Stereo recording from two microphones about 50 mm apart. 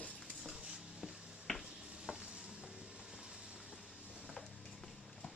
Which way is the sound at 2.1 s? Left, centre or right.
Centre.